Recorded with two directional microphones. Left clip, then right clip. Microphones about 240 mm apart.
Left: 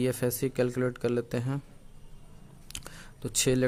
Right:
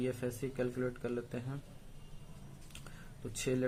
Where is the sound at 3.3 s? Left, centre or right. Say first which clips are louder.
Left 9 dB; left.